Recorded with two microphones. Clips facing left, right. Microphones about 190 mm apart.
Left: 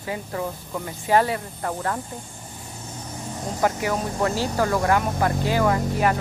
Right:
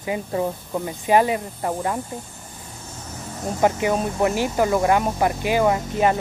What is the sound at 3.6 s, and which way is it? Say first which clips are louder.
Speech: right 4 dB; 20° right (ahead or behind).